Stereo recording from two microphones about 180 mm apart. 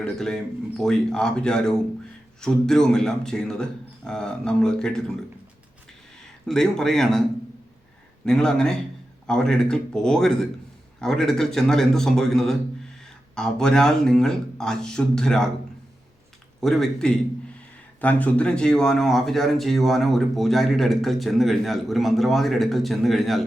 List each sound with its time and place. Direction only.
0.0 s speech: 5° left (ahead or behind)
6.4 s speech: centre (ahead or behind)
8.2 s speech: 5° left (ahead or behind)
16.6 s speech: centre (ahead or behind)